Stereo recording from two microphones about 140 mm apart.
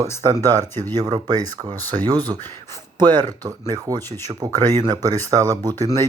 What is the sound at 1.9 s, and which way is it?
Speech, 30° right (ahead or behind).